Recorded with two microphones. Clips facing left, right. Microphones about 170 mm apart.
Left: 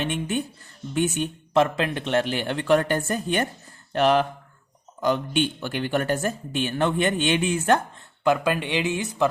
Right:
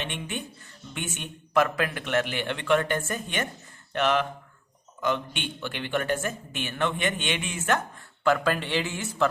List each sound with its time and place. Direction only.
0.0 s speech: 40° left (ahead or behind)
7.9 s speech: 15° left (ahead or behind)